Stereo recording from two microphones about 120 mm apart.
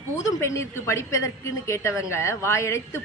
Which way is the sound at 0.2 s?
25° left (ahead or behind).